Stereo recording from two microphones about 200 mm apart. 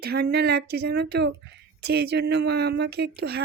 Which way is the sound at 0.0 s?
50° right (ahead or behind).